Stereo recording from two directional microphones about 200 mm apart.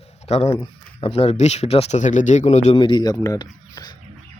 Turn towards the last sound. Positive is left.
turn(degrees=20)  # may be behind; listen again after turning